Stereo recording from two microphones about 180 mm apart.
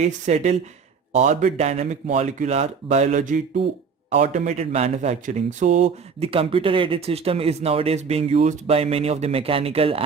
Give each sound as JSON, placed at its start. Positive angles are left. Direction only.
{"t": 0.0, "sound": "speech", "side_deg": -40}